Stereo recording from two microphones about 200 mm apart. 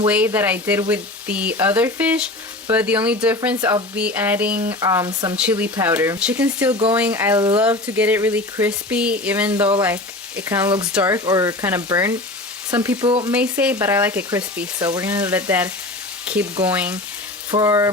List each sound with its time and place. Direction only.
0.1 s frying: 10° right (ahead or behind)
3.6 s frying: 15° right (ahead or behind)
5.4 s frying: 5° right (ahead or behind)
7.1 s speech: 15° right (ahead or behind)
7.6 s frying: 5° right (ahead or behind)
9.8 s speech: 10° right (ahead or behind)
10.9 s frying: 15° right (ahead or behind)
13.1 s speech: 25° right (ahead or behind)
13.3 s frying: 5° right (ahead or behind)